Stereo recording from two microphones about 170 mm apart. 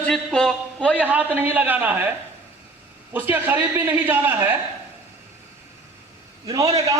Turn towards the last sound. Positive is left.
turn(degrees=-20)  # may be behind; listen again after turning